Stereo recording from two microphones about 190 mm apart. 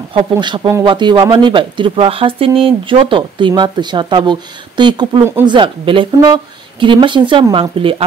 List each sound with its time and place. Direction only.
0.1 s speech: 25° right (ahead or behind)